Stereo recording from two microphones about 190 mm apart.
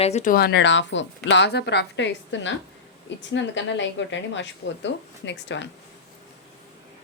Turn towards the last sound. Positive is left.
turn(degrees=70)  # may be behind; listen again after turning